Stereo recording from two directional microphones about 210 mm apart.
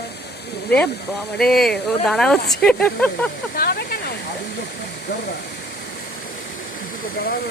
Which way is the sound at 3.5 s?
45° left (ahead or behind).